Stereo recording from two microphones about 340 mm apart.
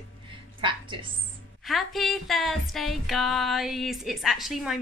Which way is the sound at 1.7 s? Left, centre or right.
Centre.